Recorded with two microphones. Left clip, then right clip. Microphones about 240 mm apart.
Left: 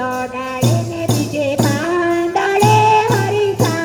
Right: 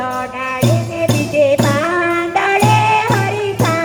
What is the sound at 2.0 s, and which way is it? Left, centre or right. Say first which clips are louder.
Music: right 1 dB; right.